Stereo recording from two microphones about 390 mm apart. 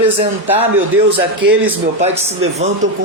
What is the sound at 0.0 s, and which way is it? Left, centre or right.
A man's voice, centre.